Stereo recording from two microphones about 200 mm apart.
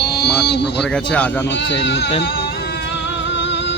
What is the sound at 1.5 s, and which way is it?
Speech, 65° left (ahead or behind).